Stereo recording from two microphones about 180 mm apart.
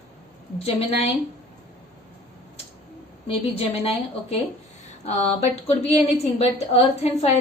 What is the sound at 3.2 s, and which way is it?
A woman's voice, 35° left (ahead or behind).